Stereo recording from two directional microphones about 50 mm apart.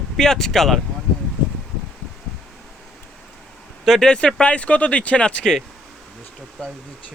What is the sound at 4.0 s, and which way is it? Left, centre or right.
Speech, centre.